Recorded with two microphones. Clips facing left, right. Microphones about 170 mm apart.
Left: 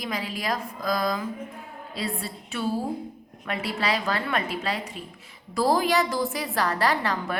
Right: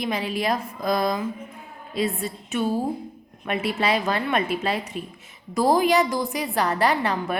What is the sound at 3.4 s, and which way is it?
A woman's voice, 20° right (ahead or behind).